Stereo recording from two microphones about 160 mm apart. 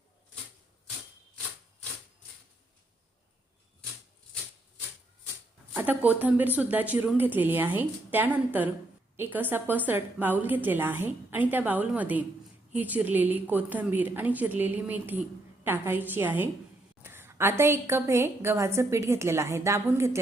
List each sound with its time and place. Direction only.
5.7 s a woman's voice: 10° right (ahead or behind)